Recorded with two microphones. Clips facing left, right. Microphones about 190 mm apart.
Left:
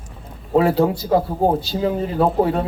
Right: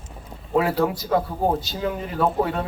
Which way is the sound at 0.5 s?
30° left (ahead or behind).